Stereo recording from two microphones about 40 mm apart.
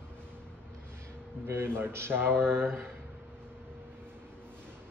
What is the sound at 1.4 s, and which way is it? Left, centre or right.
Speech, right.